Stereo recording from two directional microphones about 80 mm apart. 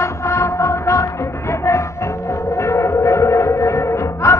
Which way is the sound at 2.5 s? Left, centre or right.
Left.